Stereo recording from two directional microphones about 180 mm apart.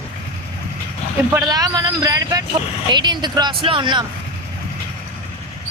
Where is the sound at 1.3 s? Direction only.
20° right (ahead or behind).